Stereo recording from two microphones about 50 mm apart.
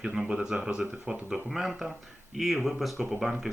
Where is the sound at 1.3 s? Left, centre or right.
Centre.